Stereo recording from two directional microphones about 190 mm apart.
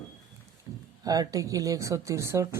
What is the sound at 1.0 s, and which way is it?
Speech, 20° right (ahead or behind).